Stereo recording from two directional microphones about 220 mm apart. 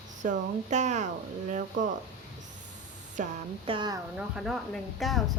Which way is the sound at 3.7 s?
20° right (ahead or behind).